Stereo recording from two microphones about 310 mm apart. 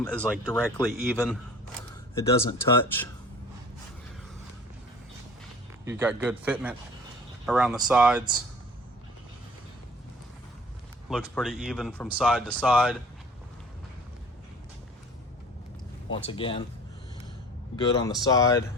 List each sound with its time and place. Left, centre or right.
0.0 s speech: centre
5.8 s speech: centre
11.1 s speech: centre
16.0 s speech: centre
17.7 s speech: centre